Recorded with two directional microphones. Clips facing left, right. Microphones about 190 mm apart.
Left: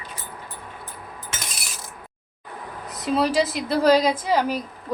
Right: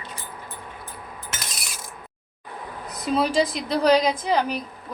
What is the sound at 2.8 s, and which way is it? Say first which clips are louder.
A woman's voice: left 1 dB; centre (ahead or behind).